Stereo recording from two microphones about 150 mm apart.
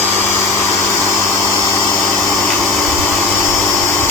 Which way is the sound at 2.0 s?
Centre (ahead or behind).